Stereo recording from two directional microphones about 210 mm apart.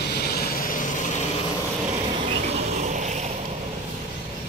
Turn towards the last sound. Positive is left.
turn(degrees=-35)  # may be behind; listen again after turning